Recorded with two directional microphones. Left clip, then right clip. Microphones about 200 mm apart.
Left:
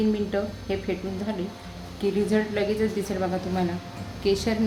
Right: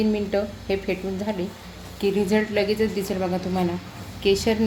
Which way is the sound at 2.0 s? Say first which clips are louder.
Right 3 dB; 10° right (ahead or behind).